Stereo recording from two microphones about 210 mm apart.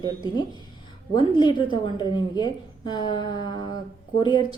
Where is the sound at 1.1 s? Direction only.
25° left (ahead or behind).